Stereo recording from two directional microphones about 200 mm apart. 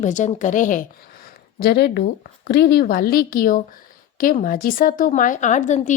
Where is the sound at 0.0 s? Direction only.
35° left (ahead or behind).